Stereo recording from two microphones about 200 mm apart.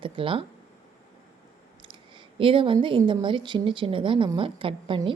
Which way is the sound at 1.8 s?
25° right (ahead or behind).